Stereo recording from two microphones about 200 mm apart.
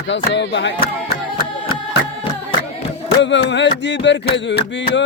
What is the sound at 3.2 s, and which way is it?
Speech, 65° left (ahead or behind).